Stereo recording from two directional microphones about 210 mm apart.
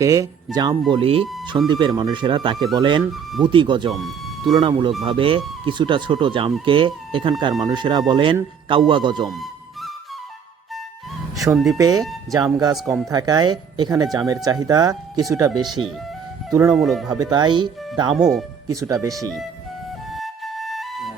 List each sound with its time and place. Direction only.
0.0 s speech: 15° right (ahead or behind)
9.2 s music: centre (ahead or behind)
11.5 s speech: centre (ahead or behind)
11.8 s speech: 15° right (ahead or behind)
12.7 s speech: centre (ahead or behind)
13.1 s speech: 20° right (ahead or behind)
16.7 s speech: centre (ahead or behind)
17.1 s speech: 20° right (ahead or behind)
18.1 s speech: centre (ahead or behind)
18.7 s speech: 15° right (ahead or behind)
20.1 s flute: centre (ahead or behind)